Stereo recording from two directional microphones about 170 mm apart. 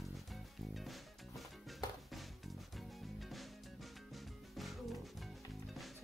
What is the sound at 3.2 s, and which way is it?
Music, centre (ahead or behind).